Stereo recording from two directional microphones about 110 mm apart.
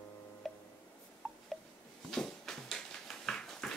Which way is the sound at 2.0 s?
5° left (ahead or behind).